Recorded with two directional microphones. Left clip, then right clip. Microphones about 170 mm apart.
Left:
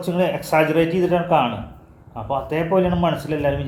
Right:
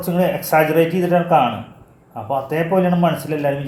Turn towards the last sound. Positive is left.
turn(degrees=-15)  # may be behind; listen again after turning